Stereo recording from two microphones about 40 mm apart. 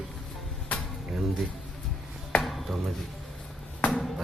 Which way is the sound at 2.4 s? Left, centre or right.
Centre.